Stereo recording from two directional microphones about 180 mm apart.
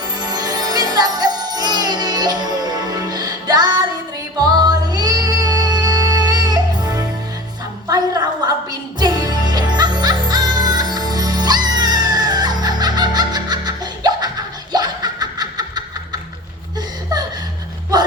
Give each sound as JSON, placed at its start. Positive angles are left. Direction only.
{"t": 0.2, "sound": "music", "side_deg": -20}
{"t": 14.7, "sound": "laughter", "side_deg": -20}
{"t": 17.9, "sound": "a sound", "side_deg": -20}